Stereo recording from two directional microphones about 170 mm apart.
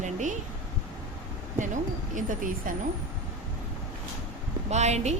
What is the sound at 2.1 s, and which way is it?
Speech, 50° right (ahead or behind).